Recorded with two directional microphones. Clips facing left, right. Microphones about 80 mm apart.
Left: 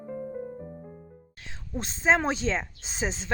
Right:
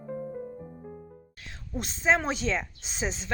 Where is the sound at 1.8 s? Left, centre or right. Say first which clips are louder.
Left 1 dB; left.